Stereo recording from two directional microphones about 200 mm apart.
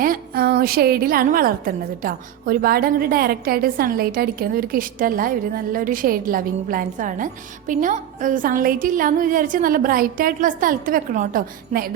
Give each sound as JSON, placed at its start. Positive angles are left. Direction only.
{"t": 0.0, "sound": "a woman's voice", "side_deg": -50}